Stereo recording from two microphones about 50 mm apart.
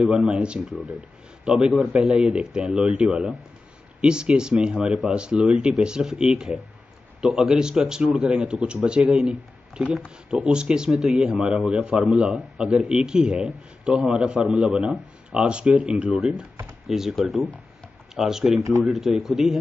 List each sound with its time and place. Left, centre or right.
0.0 s a man's voice: centre
10.0 s a man's voice: right
16.8 s speech: centre
18.6 s speech: right
18.9 s speech: centre